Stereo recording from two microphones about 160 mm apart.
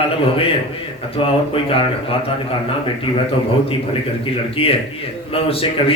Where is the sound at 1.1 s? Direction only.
35° left (ahead or behind).